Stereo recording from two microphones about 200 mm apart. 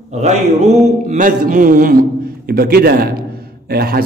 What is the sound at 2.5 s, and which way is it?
A man's voice, 50° right (ahead or behind).